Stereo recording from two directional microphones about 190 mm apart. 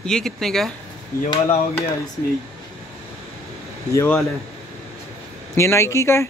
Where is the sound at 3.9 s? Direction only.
15° left (ahead or behind).